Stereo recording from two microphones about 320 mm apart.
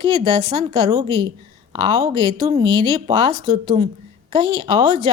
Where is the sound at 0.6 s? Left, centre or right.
Centre.